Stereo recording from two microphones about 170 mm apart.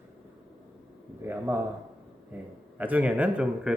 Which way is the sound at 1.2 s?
15° right (ahead or behind).